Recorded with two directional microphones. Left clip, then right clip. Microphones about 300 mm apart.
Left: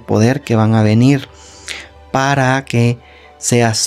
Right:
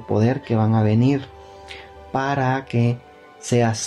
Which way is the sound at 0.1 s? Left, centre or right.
Left.